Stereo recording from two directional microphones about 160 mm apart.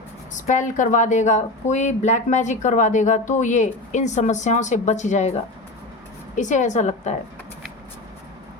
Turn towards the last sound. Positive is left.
turn(degrees=45)  # may be behind; listen again after turning